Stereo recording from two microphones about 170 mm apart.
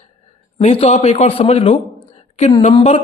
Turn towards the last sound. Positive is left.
turn(degrees=30)  # may be behind; listen again after turning